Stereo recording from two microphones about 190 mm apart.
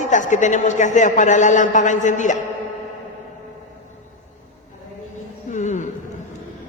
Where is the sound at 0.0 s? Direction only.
40° left (ahead or behind).